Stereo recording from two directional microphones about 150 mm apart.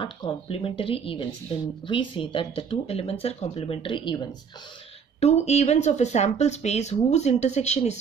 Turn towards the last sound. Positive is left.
turn(degrees=50)  # may be behind; listen again after turning